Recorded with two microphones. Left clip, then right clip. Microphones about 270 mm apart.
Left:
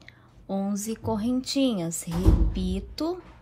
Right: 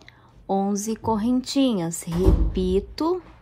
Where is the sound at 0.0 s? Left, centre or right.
Centre.